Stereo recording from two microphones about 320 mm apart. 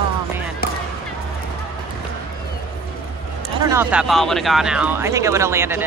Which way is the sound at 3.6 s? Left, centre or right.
Centre.